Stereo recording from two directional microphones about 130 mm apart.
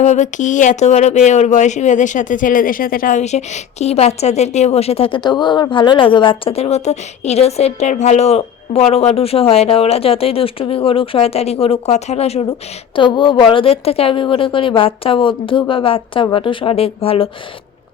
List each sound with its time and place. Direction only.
0.0 s speech: 65° left (ahead or behind)
13.1 s a woman's voice: 40° left (ahead or behind)